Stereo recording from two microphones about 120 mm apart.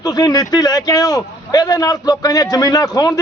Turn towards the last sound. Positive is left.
turn(degrees=30)  # may be behind; listen again after turning